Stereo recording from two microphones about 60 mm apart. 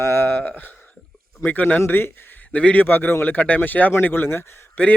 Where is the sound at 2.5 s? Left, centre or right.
Left.